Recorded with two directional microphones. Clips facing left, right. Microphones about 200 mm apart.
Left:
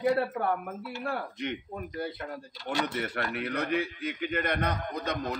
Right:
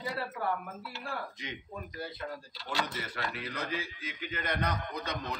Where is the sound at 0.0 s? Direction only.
60° left (ahead or behind).